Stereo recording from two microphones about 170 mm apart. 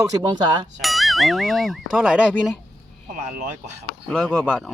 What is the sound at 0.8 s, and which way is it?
Speech, centre (ahead or behind).